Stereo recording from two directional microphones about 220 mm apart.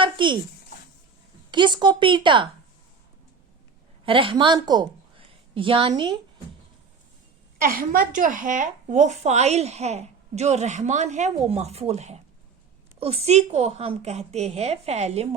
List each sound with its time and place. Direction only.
0.0 s a sound: 20° right (ahead or behind)
1.5 s a woman's voice: 20° right (ahead or behind)
4.0 s a woman's voice: 25° right (ahead or behind)
7.6 s a woman's voice: 40° right (ahead or behind)